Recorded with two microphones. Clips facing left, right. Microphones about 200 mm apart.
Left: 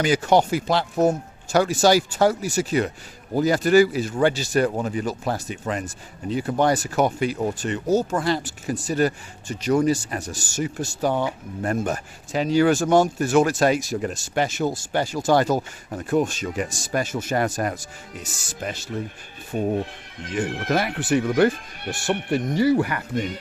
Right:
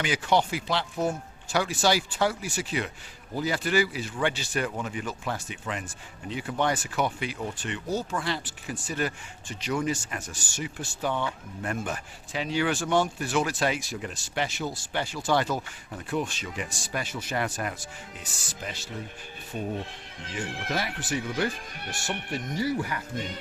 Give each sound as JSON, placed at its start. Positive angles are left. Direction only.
{"t": 0.0, "sound": "speech", "side_deg": 40}